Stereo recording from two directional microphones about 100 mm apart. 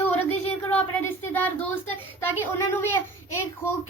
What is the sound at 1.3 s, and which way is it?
Speech, 15° left (ahead or behind).